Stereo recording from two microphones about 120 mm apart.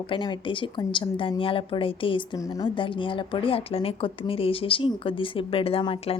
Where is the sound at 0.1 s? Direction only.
40° left (ahead or behind).